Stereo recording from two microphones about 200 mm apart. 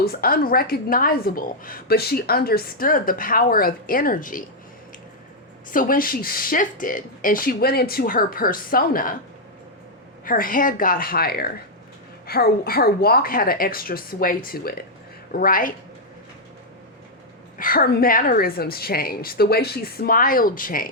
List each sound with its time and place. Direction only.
0.0 s speech: 50° left (ahead or behind)
5.7 s speech: 45° left (ahead or behind)
10.2 s speech: 45° left (ahead or behind)
17.6 s speech: 45° left (ahead or behind)